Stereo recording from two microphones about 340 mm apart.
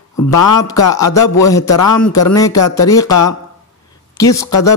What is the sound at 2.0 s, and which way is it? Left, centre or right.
Speech, left.